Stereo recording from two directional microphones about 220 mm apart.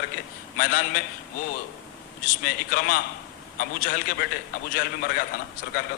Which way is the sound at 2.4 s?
45° left (ahead or behind).